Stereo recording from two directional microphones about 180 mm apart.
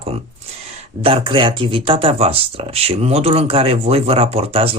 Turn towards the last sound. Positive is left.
turn(degrees=-30)  # may be behind; listen again after turning